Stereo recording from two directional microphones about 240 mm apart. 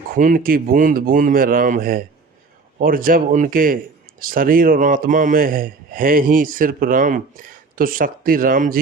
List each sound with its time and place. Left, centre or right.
0.1 s speech: right